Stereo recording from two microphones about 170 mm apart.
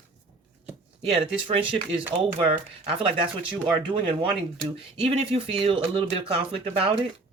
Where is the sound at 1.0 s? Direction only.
35° right (ahead or behind).